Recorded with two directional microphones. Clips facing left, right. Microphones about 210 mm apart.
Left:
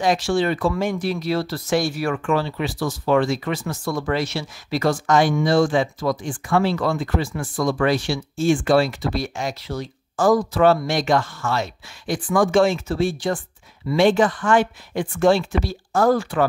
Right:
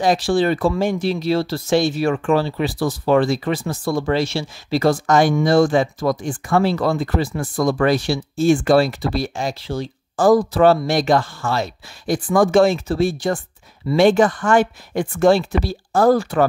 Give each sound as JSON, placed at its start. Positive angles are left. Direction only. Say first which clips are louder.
{"t": 0.0, "sound": "speech", "louder": "right 3 dB", "side_deg": -35}